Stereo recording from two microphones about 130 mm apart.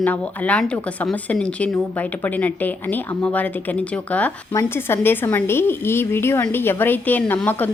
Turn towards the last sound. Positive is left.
turn(degrees=15)  # may be behind; listen again after turning